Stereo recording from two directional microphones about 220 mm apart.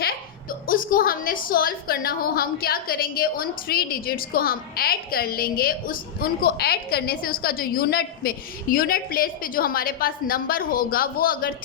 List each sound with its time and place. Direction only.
0.7 s a woman's voice: 40° left (ahead or behind)